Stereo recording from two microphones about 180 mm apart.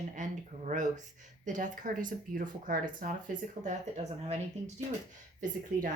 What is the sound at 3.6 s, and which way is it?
Speech, 20° right (ahead or behind).